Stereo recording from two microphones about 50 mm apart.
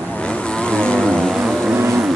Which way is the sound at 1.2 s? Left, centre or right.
Centre.